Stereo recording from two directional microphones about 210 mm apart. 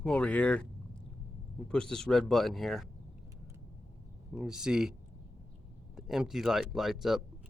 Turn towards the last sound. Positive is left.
turn(degrees=0)  # may be behind; listen again after turning